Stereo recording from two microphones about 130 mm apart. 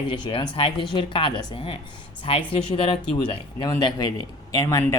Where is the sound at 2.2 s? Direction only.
45° left (ahead or behind).